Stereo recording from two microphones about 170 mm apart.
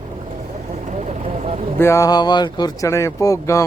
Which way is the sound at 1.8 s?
15° left (ahead or behind).